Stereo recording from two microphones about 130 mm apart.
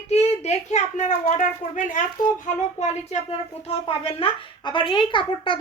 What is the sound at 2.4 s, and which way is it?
Speech, 60° left (ahead or behind).